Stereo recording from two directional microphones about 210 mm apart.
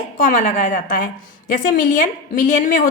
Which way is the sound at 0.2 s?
40° left (ahead or behind).